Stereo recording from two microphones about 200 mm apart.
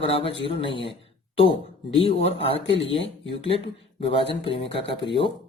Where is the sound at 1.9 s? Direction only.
30° left (ahead or behind).